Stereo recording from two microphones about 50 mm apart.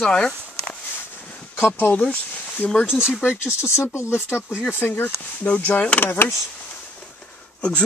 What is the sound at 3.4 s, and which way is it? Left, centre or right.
Speech, left.